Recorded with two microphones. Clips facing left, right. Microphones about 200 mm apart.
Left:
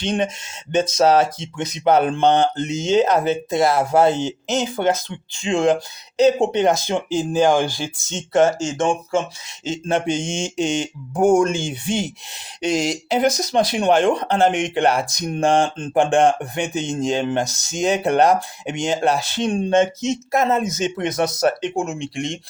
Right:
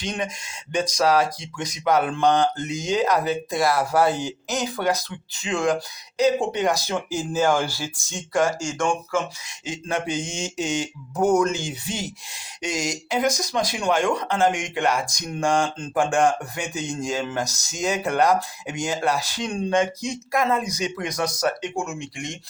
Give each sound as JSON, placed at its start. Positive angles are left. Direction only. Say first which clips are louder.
{"t": 0.0, "sound": "speech", "louder": "left 7 dB", "side_deg": 25}